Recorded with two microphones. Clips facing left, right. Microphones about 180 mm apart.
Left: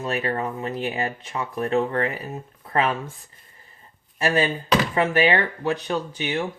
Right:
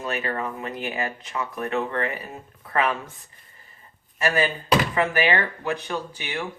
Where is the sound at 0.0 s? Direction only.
35° left (ahead or behind).